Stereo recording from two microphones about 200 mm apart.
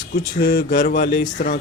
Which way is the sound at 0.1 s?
55° left (ahead or behind).